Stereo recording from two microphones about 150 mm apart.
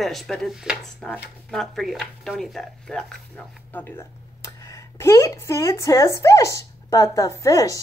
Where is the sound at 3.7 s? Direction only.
15° left (ahead or behind).